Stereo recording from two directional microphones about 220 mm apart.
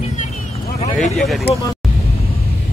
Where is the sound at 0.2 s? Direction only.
35° left (ahead or behind).